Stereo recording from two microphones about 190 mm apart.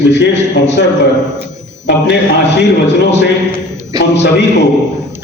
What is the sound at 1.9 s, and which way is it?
A man's voice, 65° left (ahead or behind).